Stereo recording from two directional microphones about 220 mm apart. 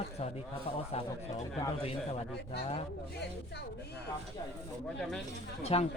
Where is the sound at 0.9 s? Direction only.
30° left (ahead or behind).